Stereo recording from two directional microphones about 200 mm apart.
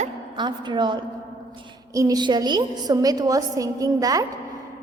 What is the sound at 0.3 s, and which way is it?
A woman's voice, 25° right (ahead or behind).